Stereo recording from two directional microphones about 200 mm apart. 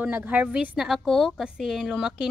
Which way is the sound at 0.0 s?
10° right (ahead or behind).